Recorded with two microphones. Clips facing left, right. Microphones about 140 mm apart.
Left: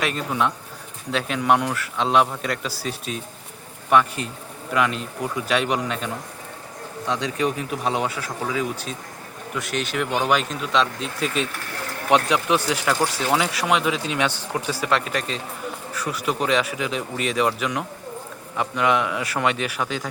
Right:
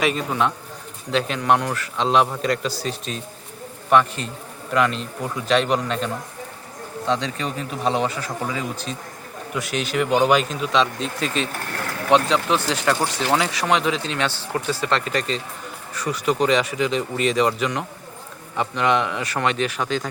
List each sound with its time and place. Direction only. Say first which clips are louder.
0.0 s speech: right 2 dB; centre (ahead or behind)
7.1 s speech: left 1 dB; 10° left (ahead or behind)
12.1 s speech: right 1 dB; 15° left (ahead or behind)